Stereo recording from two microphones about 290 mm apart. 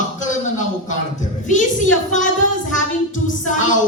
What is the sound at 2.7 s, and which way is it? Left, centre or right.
A woman's voice, left.